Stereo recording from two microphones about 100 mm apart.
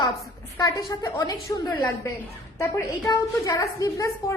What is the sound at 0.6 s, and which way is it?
A woman's voice, 40° left (ahead or behind).